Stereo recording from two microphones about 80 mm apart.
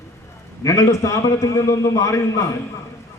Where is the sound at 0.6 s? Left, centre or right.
Left.